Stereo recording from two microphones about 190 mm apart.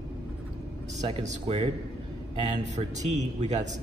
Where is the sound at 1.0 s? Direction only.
30° right (ahead or behind).